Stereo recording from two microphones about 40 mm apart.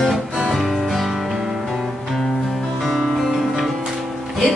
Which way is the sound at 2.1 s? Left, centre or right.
Centre.